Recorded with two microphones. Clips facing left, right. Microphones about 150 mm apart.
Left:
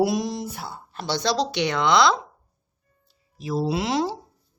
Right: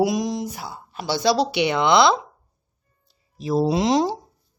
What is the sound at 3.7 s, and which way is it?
Speech, 20° right (ahead or behind).